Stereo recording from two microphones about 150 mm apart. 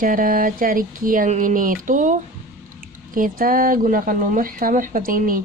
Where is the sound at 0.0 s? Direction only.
65° right (ahead or behind).